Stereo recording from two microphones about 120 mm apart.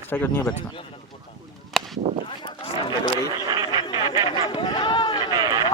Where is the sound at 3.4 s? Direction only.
35° right (ahead or behind).